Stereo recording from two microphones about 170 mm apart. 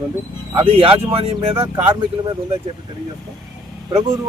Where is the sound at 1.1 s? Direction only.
35° right (ahead or behind).